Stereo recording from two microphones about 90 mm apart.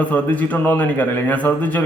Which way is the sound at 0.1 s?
15° left (ahead or behind).